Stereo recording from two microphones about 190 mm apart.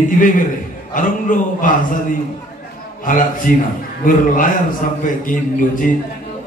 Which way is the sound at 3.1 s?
45° left (ahead or behind).